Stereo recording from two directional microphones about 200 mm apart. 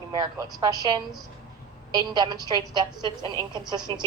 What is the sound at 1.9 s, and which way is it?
A woman's voice, 20° right (ahead or behind).